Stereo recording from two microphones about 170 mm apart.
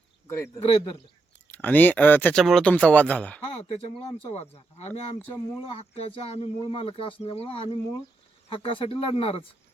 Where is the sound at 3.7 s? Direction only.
35° left (ahead or behind).